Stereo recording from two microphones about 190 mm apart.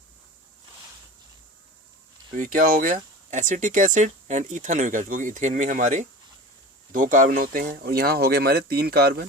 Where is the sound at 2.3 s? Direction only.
45° right (ahead or behind).